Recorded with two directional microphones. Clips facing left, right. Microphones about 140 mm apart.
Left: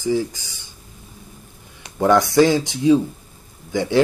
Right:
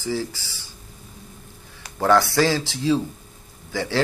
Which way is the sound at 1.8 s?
25° left (ahead or behind).